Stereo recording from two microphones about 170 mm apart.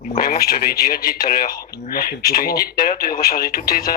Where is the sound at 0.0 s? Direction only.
55° left (ahead or behind).